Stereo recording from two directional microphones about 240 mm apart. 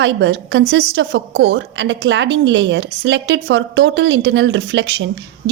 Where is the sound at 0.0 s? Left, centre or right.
Right.